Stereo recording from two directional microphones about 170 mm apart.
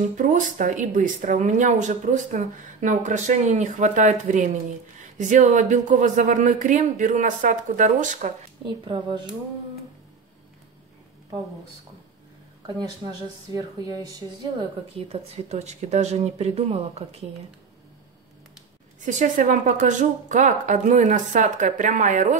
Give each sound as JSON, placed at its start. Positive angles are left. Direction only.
{"t": 0.1, "sound": "speech", "side_deg": -50}
{"t": 8.6, "sound": "speech", "side_deg": -30}
{"t": 12.6, "sound": "speech", "side_deg": -25}
{"t": 15.0, "sound": "speech", "side_deg": -40}
{"t": 19.0, "sound": "speech", "side_deg": -50}